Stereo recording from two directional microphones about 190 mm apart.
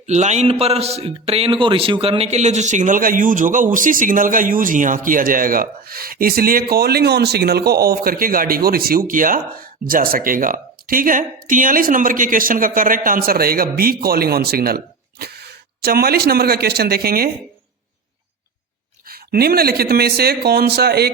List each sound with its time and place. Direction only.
0.1 s a man's voice: 35° right (ahead or behind); by 17.3 s 50° right (ahead or behind)
19.0 s speech: 55° right (ahead or behind)